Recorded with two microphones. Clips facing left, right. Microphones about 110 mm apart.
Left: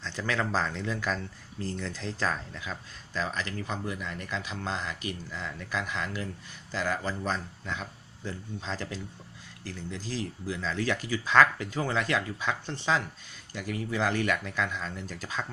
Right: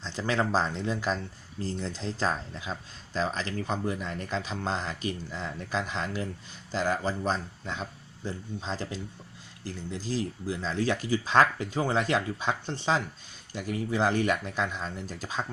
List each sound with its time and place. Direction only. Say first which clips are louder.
0.0 s speech: right 2 dB; 25° right (ahead or behind)